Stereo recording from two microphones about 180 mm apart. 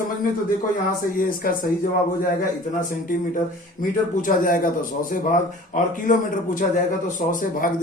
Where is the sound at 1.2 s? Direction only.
50° left (ahead or behind).